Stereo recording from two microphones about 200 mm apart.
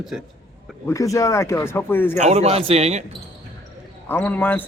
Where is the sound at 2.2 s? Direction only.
30° right (ahead or behind).